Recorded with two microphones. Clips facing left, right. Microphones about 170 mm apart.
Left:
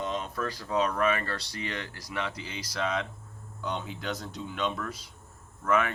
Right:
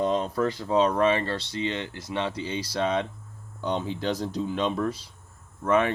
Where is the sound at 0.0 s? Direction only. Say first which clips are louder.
Right 8 dB; 35° right (ahead or behind).